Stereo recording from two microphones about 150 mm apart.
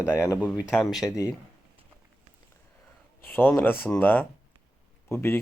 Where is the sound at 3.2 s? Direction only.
15° left (ahead or behind).